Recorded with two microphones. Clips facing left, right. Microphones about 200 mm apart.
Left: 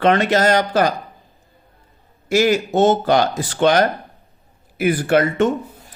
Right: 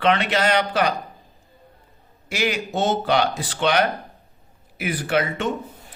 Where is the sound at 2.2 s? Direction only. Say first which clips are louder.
Left 9 dB; 45° left (ahead or behind).